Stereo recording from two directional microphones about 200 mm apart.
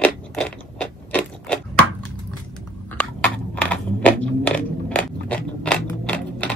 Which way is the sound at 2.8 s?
5° left (ahead or behind).